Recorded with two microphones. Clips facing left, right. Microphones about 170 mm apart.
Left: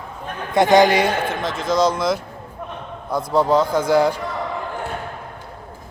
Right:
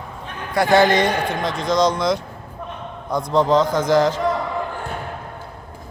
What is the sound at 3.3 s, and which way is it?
Speech, 5° left (ahead or behind).